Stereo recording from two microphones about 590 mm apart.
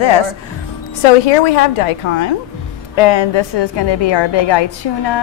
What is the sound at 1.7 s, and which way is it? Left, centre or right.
Speech, left.